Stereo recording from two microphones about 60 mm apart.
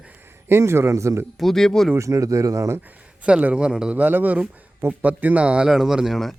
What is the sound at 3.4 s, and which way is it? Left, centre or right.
Speech, centre.